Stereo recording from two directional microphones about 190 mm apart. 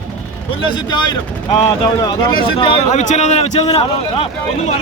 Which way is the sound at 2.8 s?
40° left (ahead or behind).